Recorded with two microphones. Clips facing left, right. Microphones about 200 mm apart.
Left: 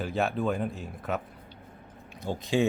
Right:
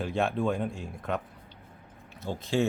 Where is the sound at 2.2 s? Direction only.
15° left (ahead or behind).